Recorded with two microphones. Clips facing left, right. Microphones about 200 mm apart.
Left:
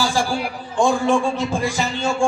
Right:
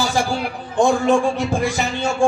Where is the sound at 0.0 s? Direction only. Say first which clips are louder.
Right 1 dB; 20° right (ahead or behind).